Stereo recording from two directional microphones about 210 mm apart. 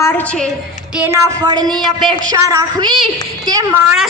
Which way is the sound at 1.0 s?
15° right (ahead or behind).